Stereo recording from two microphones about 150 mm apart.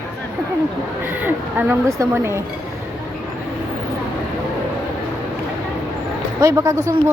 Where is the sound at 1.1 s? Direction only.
10° right (ahead or behind).